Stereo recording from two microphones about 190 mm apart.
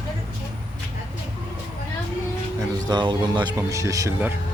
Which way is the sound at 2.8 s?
25° right (ahead or behind).